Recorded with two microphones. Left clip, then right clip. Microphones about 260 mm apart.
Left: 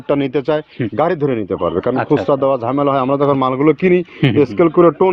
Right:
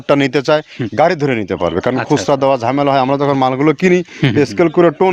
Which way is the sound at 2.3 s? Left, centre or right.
Right.